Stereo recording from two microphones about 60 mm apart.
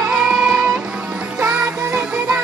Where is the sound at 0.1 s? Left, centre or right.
Centre.